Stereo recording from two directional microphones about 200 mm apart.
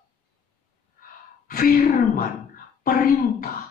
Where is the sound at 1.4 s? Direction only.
45° left (ahead or behind).